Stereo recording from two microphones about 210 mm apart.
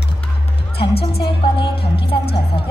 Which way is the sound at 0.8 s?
50° left (ahead or behind).